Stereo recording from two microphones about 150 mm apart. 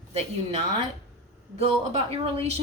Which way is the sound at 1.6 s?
40° right (ahead or behind).